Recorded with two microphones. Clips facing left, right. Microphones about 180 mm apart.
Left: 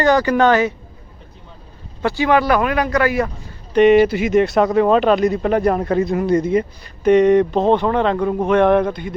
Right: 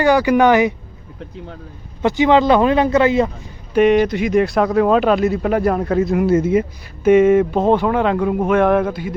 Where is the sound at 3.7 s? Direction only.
Centre (ahead or behind).